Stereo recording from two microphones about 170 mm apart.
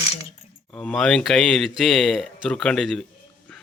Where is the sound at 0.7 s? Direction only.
5° left (ahead or behind).